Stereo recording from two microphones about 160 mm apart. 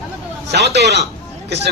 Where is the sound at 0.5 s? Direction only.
90° right.